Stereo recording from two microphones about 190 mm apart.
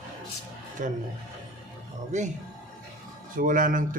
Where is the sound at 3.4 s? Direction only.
45° right (ahead or behind).